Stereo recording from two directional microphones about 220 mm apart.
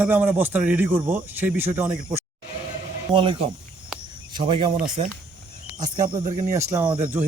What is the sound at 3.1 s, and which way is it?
Speech, 25° right (ahead or behind).